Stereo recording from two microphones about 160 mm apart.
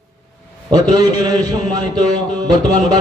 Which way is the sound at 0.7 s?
25° right (ahead or behind).